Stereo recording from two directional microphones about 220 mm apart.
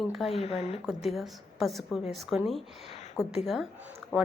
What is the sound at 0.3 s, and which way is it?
Speech, 30° left (ahead or behind).